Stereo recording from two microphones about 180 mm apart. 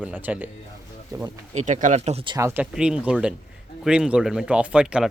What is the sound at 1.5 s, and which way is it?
Speech, 45° right (ahead or behind).